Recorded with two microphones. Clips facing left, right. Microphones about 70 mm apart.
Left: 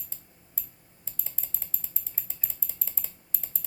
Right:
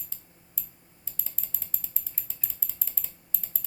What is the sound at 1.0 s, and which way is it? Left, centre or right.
Typing, left.